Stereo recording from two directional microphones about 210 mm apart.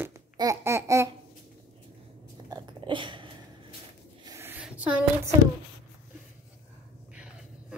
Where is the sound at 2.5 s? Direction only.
20° right (ahead or behind).